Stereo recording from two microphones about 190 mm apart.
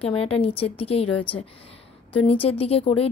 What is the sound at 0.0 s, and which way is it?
A woman's voice, 30° left (ahead or behind).